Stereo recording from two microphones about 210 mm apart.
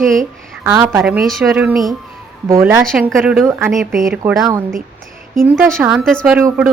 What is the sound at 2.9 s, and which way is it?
Speech, centre (ahead or behind).